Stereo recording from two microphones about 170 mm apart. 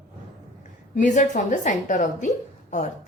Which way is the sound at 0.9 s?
45° left (ahead or behind).